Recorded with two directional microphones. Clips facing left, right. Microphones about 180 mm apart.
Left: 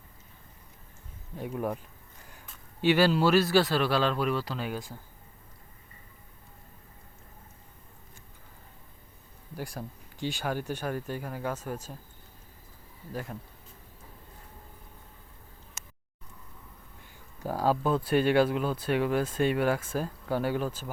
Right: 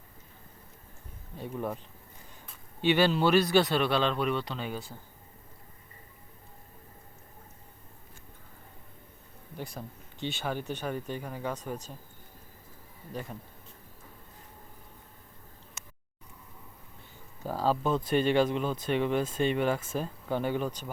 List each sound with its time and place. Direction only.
1.4 s speech: 10° left (ahead or behind)
2.3 s a sound: 5° left (ahead or behind)
3.5 s speech: centre (ahead or behind)
9.6 s speech: 10° left (ahead or behind)
17.4 s speech: 10° left (ahead or behind)